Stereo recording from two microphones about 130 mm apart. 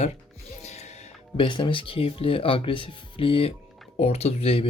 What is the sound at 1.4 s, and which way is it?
Speech, 40° left (ahead or behind).